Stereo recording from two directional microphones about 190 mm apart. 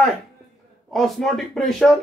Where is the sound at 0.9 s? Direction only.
Centre (ahead or behind).